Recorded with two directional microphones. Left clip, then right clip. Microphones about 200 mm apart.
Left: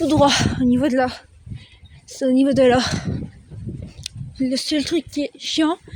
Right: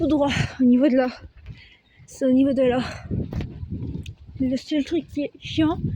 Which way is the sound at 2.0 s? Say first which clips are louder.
Left 1 dB; 10° left (ahead or behind).